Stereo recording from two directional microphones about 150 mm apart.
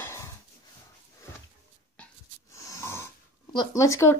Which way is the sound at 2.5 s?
20° left (ahead or behind).